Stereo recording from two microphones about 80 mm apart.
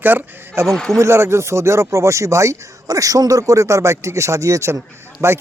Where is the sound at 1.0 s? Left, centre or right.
Right.